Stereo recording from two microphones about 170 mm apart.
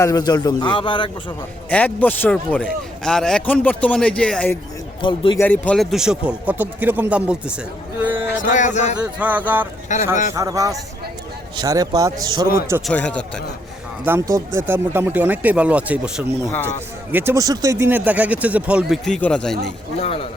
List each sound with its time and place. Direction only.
0.0 s a man's voice: 20° left (ahead or behind)
1.7 s a man's voice: 10° left (ahead or behind)
5.0 s a man's voice: 30° left (ahead or behind)
5.4 s speech: 10° left (ahead or behind); by 8.4 s 10° right (ahead or behind)
8.4 s speech: 45° left (ahead or behind)
9.0 s speech: 10° right (ahead or behind)
9.9 s speech: 45° left (ahead or behind)
10.3 s a man's voice: 20° right (ahead or behind)
12.8 s speech: 5° left (ahead or behind)
14.0 s speech: 15° right (ahead or behind); by 19.7 s 5° left (ahead or behind)
20.0 s a man's voice: 35° left (ahead or behind)